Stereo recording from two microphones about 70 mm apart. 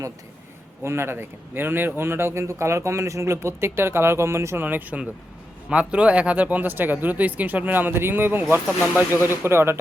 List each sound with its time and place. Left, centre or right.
0.8 s speech: right
4.6 s speech: right